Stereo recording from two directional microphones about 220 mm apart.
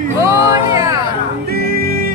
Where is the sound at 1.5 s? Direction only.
45° right (ahead or behind).